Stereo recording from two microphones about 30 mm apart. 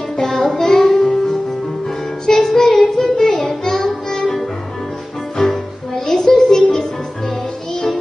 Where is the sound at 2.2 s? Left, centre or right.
Centre.